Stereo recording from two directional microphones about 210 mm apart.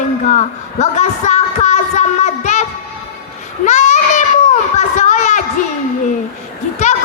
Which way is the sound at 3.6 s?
35° left (ahead or behind).